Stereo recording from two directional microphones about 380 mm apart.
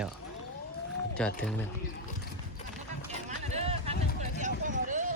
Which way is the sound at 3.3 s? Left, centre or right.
Centre.